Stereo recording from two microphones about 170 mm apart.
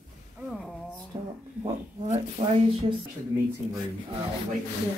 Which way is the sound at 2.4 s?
40° right (ahead or behind).